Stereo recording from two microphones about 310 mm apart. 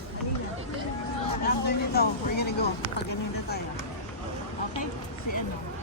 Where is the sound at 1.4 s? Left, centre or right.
Left.